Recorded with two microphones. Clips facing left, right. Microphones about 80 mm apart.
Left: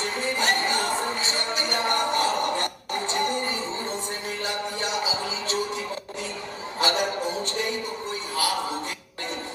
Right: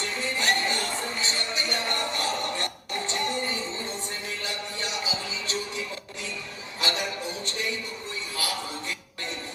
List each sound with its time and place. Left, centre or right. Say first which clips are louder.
0.0 s music: left 3 dB; left